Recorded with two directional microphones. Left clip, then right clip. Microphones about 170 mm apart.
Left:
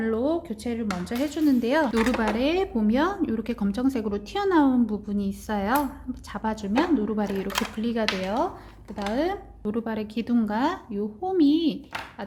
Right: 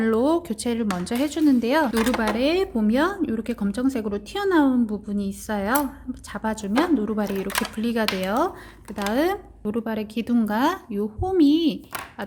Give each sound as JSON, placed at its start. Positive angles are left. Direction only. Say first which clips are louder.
{"t": 0.0, "sound": "speech", "louder": "right 5 dB", "side_deg": -35}
{"t": 9.6, "sound": "a woman's voice", "louder": "right 2 dB", "side_deg": -15}